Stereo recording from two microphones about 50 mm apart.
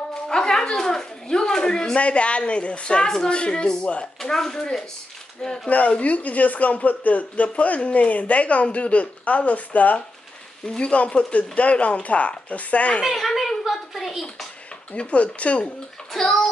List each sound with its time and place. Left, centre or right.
0.1 s speech: centre
4.2 s speech: centre
5.7 s speech: left
13.0 s a sound: centre
14.9 s speech: left
16.1 s speech: centre